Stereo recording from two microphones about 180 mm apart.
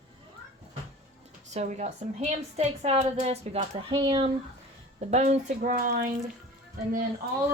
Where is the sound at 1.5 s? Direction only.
40° right (ahead or behind).